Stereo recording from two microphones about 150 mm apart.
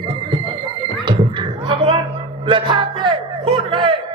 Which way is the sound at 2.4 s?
35° right (ahead or behind).